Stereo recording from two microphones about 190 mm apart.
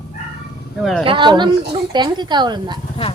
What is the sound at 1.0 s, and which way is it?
Speech, 25° right (ahead or behind).